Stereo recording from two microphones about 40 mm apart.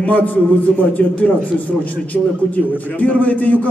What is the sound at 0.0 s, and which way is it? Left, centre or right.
A man's voice, left.